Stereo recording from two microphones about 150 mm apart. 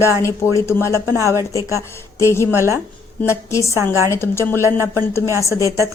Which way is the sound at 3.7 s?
20° right (ahead or behind).